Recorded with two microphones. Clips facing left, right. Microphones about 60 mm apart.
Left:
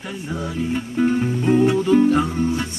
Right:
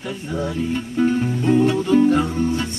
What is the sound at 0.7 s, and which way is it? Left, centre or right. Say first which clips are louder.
Music: left 1 dB; centre.